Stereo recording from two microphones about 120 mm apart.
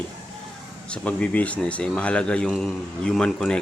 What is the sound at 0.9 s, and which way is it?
A man's voice, 10° left (ahead or behind).